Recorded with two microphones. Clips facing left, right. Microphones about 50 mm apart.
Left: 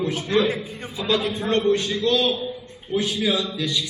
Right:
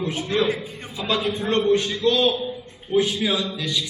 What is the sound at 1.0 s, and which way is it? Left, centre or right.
A man's voice, right.